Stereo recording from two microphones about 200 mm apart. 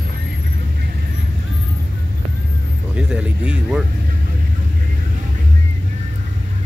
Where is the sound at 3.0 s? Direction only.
5° right (ahead or behind).